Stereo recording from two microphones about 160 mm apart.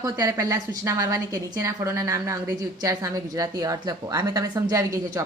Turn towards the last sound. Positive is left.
turn(degrees=-20)  # may be behind; listen again after turning